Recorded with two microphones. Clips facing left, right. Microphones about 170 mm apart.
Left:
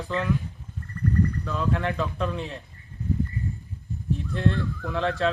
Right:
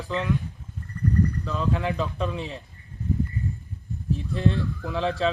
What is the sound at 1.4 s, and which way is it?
Speech, centre (ahead or behind).